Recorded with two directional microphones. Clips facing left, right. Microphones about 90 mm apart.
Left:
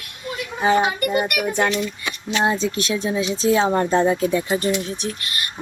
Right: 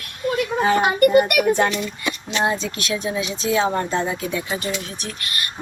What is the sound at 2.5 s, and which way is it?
Speech, 25° left (ahead or behind).